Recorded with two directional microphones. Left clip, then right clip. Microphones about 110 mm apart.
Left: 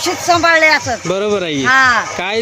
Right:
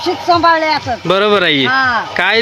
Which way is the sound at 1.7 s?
25° left (ahead or behind).